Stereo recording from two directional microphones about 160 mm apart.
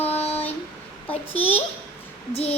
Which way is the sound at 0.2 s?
40° left (ahead or behind).